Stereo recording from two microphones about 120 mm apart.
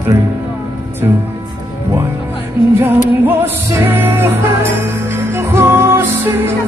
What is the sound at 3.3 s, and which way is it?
Music, 20° right (ahead or behind).